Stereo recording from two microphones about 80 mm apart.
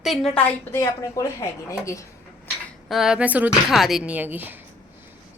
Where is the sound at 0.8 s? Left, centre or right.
Left.